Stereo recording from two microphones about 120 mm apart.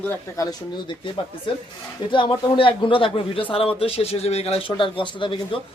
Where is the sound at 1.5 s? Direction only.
45° left (ahead or behind).